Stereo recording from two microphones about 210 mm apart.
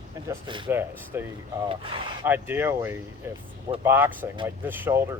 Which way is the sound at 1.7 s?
25° right (ahead or behind).